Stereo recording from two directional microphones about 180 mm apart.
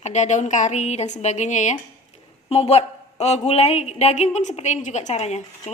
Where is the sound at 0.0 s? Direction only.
40° left (ahead or behind).